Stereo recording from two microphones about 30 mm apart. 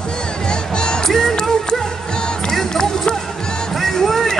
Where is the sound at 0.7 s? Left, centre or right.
Left.